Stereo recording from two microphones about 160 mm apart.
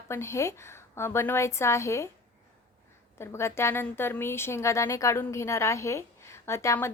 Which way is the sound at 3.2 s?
15° left (ahead or behind).